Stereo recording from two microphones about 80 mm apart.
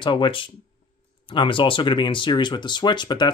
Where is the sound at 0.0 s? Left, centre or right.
Left.